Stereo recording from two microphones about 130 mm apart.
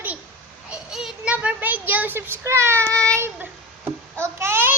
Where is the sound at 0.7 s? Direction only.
5° right (ahead or behind).